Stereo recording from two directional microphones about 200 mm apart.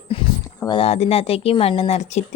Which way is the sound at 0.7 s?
30° left (ahead or behind).